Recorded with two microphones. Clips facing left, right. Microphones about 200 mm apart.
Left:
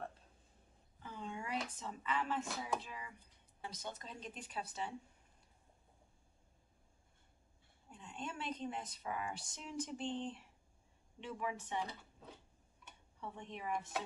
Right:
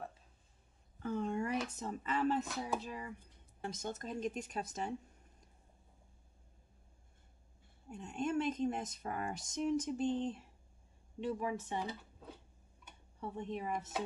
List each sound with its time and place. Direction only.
0.9 s speech: 45° right (ahead or behind)
7.9 s speech: 45° right (ahead or behind)
13.2 s speech: 40° right (ahead or behind)